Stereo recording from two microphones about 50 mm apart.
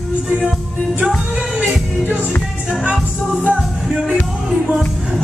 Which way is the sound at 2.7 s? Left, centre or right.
Centre.